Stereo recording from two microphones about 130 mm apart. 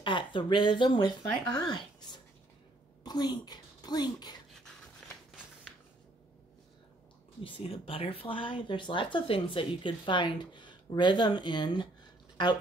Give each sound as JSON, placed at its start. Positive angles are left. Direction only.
{"t": 0.0, "sound": "speech", "side_deg": 40}
{"t": 3.0, "sound": "speech", "side_deg": 30}
{"t": 7.4, "sound": "speech", "side_deg": 40}